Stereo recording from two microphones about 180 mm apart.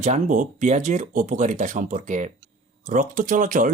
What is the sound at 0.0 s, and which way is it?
Speech, 45° right (ahead or behind).